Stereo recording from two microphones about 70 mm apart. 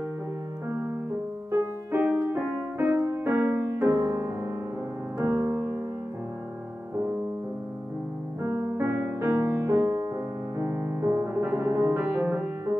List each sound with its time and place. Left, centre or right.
1.5 s music: right
8.4 s music: right
10.6 s music: right
12.1 s music: right